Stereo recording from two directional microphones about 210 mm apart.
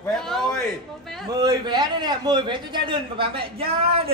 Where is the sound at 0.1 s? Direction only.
5° left (ahead or behind).